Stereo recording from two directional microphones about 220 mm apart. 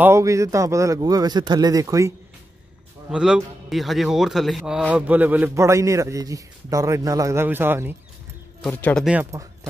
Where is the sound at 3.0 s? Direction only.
5° right (ahead or behind).